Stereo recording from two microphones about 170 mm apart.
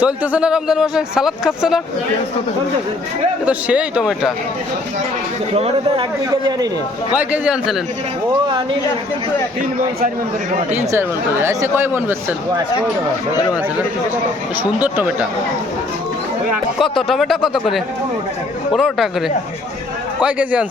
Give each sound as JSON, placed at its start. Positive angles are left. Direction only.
{"t": 0.0, "sound": "a man's voice", "side_deg": -10}
{"t": 3.4, "sound": "speech", "side_deg": -5}
{"t": 5.5, "sound": "speech", "side_deg": -35}
{"t": 7.1, "sound": "speech", "side_deg": -5}
{"t": 10.7, "sound": "speech", "side_deg": -15}
{"t": 14.6, "sound": "speech", "side_deg": -10}
{"t": 16.8, "sound": "a man's voice", "side_deg": 0}
{"t": 20.2, "sound": "speech", "side_deg": -10}